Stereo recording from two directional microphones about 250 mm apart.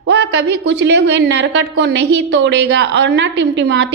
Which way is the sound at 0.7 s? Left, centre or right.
Right.